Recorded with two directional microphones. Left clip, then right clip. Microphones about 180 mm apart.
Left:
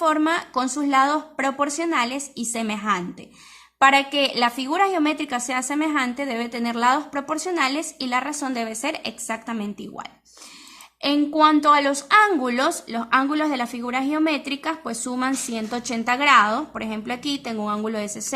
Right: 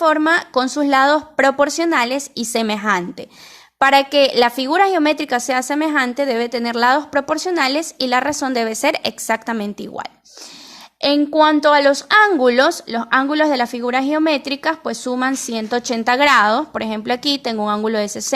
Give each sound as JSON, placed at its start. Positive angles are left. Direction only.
{"t": 0.0, "sound": "a woman's voice", "side_deg": -30}